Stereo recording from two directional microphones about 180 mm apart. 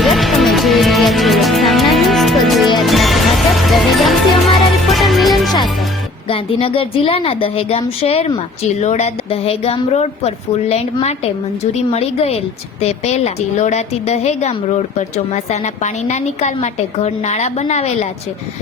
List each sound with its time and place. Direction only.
0.0 s music: centre (ahead or behind)
6.2 s a woman's voice: 30° left (ahead or behind)